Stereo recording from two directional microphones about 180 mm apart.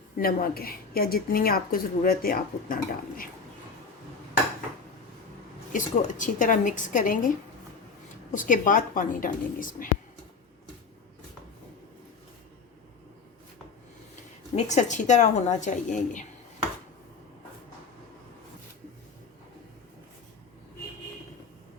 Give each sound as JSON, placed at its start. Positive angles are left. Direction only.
{"t": 0.2, "sound": "a woman's voice", "side_deg": 55}
{"t": 5.7, "sound": "a woman's voice", "side_deg": 45}
{"t": 8.3, "sound": "a woman's voice", "side_deg": 45}
{"t": 14.5, "sound": "a woman's voice", "side_deg": 40}